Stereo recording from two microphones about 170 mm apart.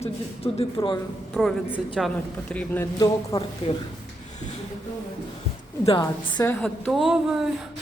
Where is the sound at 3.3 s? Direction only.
20° left (ahead or behind).